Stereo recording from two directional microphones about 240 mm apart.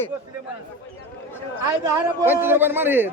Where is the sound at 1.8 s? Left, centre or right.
Centre.